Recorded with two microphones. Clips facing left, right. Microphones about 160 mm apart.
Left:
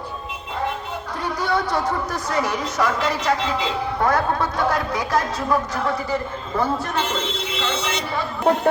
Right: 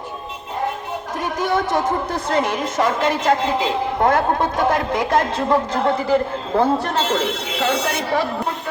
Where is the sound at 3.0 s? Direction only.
50° right (ahead or behind).